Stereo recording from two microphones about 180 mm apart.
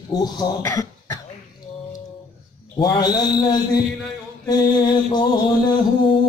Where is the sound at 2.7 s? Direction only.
25° left (ahead or behind).